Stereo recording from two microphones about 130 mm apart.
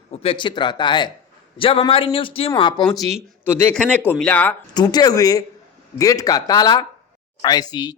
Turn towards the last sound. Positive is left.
turn(degrees=30)  # may be behind; listen again after turning